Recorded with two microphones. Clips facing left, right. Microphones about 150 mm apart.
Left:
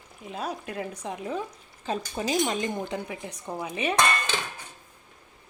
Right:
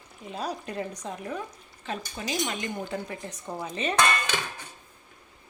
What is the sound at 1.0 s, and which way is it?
Speech, 20° left (ahead or behind).